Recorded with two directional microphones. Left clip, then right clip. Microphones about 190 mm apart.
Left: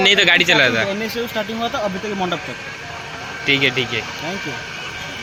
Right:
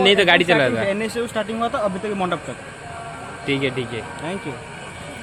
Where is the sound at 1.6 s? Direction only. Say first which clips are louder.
Right 1 dB; 5° left (ahead or behind).